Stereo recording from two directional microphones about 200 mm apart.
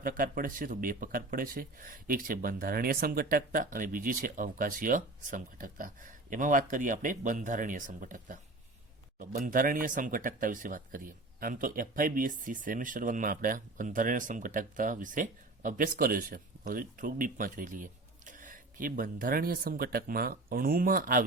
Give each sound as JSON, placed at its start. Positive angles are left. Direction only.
{"t": 0.0, "sound": "speech", "side_deg": -45}